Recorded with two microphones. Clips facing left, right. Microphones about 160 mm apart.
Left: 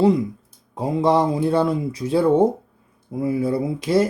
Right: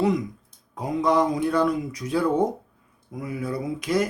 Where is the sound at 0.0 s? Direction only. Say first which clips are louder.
Left 6 dB; 30° left (ahead or behind).